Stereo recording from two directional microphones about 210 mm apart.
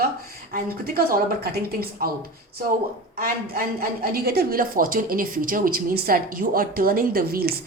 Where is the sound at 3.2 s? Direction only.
45° right (ahead or behind).